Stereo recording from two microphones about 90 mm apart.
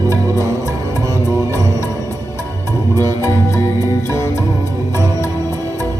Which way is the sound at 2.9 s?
30° left (ahead or behind).